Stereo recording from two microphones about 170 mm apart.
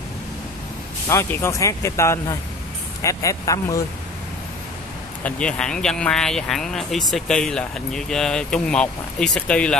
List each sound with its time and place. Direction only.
1.0 s speech: 15° left (ahead or behind)
5.2 s speech: 5° left (ahead or behind)